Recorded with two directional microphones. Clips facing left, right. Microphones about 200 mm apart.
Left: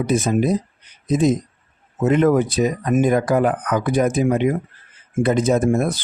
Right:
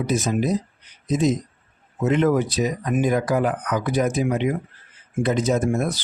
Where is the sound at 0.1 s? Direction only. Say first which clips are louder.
Left 4 dB; 55° left (ahead or behind).